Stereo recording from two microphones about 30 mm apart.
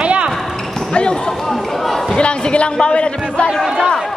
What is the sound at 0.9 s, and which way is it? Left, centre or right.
Speech, left.